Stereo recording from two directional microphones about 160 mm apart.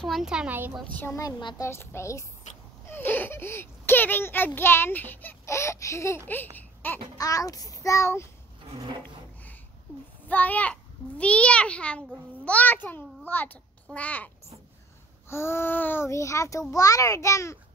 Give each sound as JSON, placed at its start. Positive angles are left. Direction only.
{"t": 0.0, "sound": "a woman's voice", "side_deg": 0}
{"t": 0.9, "sound": "a child's voice", "side_deg": 15}
{"t": 2.5, "sound": "a sound", "side_deg": 50}
{"t": 2.9, "sound": "a child's voice", "side_deg": 10}
{"t": 9.0, "sound": "a sound", "side_deg": 10}
{"t": 10.2, "sound": "a child's voice", "side_deg": 10}